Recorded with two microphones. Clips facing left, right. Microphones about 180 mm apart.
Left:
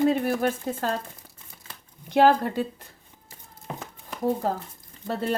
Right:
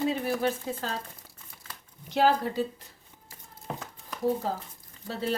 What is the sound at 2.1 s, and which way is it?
Speech, 55° left (ahead or behind).